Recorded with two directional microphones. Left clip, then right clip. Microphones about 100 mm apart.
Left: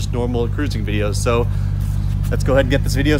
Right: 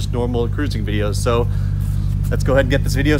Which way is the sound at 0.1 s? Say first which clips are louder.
Right 1 dB; centre (ahead or behind).